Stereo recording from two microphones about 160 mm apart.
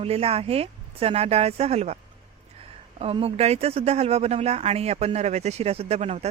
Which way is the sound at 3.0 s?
35° right (ahead or behind).